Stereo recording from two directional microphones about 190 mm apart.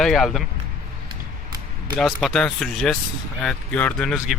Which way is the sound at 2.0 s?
Centre (ahead or behind).